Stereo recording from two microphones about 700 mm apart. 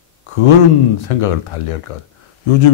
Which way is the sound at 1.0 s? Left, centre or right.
Left.